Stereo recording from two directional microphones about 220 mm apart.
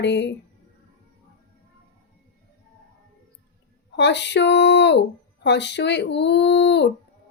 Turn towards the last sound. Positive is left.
turn(degrees=50)  # may be behind; listen again after turning